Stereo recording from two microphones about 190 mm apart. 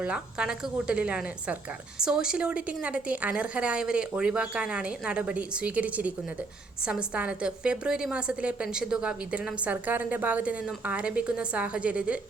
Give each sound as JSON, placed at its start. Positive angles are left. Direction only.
{"t": 0.0, "sound": "a woman's voice", "side_deg": -5}